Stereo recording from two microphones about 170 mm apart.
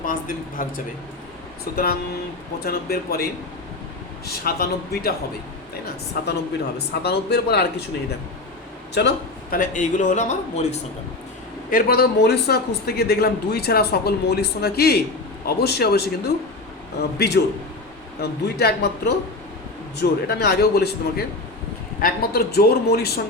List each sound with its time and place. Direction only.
0.0 s a man's voice: 55° left (ahead or behind)
1.7 s speech: 65° left (ahead or behind)
4.3 s speech: 65° left (ahead or behind)
6.7 s speech: 75° left (ahead or behind)
9.0 s speech: 80° left
9.6 s a man's voice: 50° left (ahead or behind)
11.7 s speech: 65° left (ahead or behind)
17.2 s speech: 75° left (ahead or behind)